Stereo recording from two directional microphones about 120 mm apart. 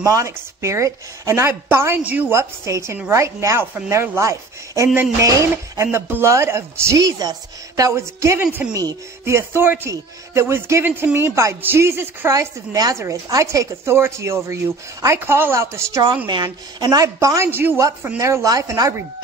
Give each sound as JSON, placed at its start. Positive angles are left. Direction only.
{"t": 0.0, "sound": "speech", "side_deg": -25}
{"t": 16.3, "sound": "speech", "side_deg": -40}